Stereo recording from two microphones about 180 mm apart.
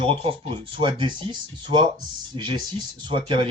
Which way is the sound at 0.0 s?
30° right (ahead or behind).